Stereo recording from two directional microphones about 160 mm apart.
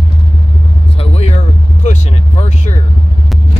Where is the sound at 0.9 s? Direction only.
40° left (ahead or behind).